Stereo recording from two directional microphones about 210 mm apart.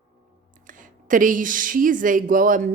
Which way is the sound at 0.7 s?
40° right (ahead or behind).